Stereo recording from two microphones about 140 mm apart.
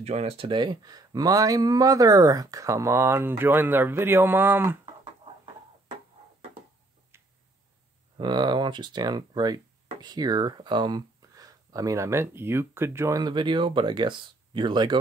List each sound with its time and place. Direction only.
0.0 s speech: 50° right (ahead or behind); by 4.7 s 15° right (ahead or behind)
8.2 s speech: 30° right (ahead or behind)